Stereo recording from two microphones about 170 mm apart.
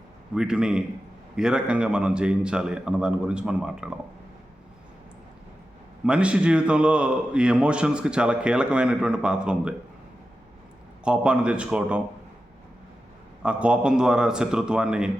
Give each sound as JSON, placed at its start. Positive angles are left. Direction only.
{"t": 0.3, "sound": "speech", "side_deg": -5}
{"t": 6.1, "sound": "speech", "side_deg": -5}
{"t": 11.0, "sound": "speech", "side_deg": -5}
{"t": 13.4, "sound": "speech", "side_deg": -5}